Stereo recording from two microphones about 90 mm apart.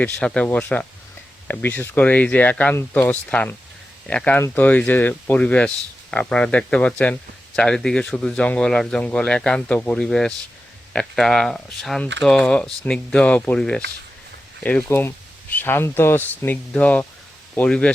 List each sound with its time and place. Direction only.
0.0 s speech: 10° left (ahead or behind)
4.4 s speech: 25° left (ahead or behind)
14.8 s speech: 25° left (ahead or behind)